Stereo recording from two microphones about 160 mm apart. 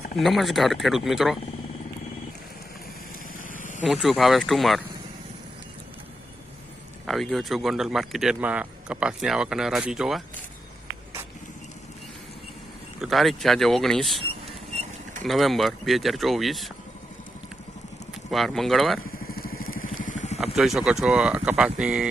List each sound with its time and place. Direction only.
0.2 s speech: centre (ahead or behind)
3.5 s vehicle: 55° left (ahead or behind)
3.8 s speech: 5° right (ahead or behind)
7.1 s speech: centre (ahead or behind)
13.0 s speech: centre (ahead or behind)
14.4 s vehicle: 45° right (ahead or behind)
15.2 s speech: centre (ahead or behind)
18.3 s speech: centre (ahead or behind)
19.2 s vehicle: 70° left (ahead or behind); by 20.4 s 45° left (ahead or behind)
20.4 s speech: 5° right (ahead or behind)